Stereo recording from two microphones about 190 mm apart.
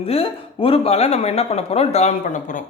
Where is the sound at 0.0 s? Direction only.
30° left (ahead or behind).